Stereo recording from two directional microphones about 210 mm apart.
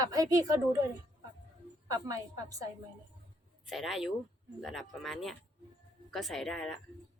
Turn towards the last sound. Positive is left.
turn(degrees=0)  # may be behind; listen again after turning